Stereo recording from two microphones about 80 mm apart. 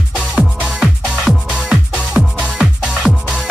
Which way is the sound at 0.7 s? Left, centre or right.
Centre.